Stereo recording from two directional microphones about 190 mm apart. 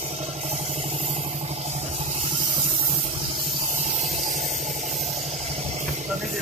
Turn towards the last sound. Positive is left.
turn(degrees=-40)  # may be behind; listen again after turning